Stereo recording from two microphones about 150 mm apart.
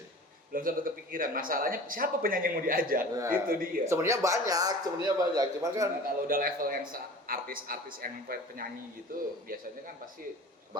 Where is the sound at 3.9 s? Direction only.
20° right (ahead or behind).